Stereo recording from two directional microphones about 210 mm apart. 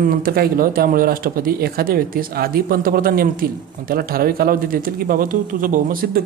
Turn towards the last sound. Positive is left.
turn(degrees=-40)  # may be behind; listen again after turning